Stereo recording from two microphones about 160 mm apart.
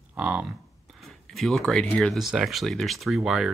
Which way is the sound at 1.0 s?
Centre (ahead or behind).